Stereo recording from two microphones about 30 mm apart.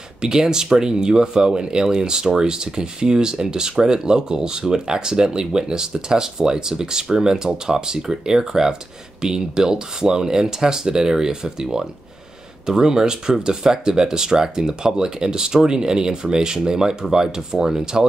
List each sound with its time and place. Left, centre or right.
0.2 s speech: right